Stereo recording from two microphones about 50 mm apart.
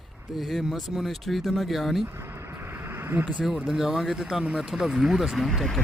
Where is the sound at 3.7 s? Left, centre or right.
Centre.